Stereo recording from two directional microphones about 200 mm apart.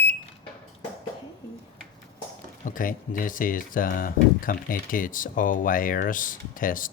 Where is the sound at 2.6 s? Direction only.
40° left (ahead or behind).